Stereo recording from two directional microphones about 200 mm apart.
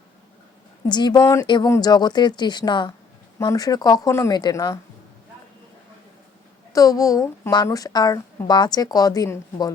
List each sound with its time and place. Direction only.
0.9 s a woman's voice: 20° left (ahead or behind)
6.7 s a woman's voice: 15° left (ahead or behind)